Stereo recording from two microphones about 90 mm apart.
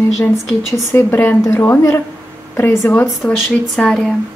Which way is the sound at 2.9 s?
20° left (ahead or behind).